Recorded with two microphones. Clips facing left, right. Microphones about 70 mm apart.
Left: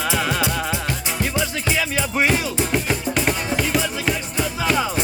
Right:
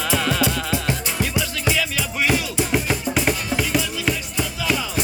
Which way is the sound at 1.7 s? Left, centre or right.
Left.